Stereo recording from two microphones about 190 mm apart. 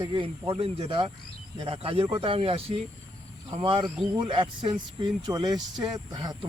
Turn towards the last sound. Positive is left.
turn(degrees=-20)  # may be behind; listen again after turning